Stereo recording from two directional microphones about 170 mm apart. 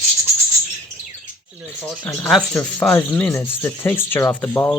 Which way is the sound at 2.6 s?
5° left (ahead or behind).